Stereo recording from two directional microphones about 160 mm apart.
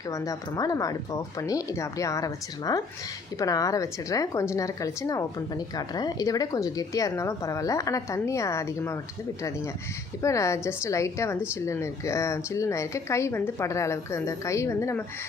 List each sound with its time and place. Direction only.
0.1 s speech: 20° left (ahead or behind)
10.2 s speech: 20° left (ahead or behind)